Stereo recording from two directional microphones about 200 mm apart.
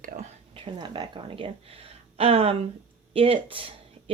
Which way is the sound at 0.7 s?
20° right (ahead or behind).